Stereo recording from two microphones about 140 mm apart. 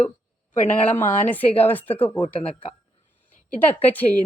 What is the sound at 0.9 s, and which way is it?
A woman's voice, 15° left (ahead or behind).